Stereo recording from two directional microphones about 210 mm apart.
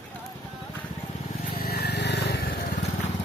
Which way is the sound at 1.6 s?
50° left (ahead or behind).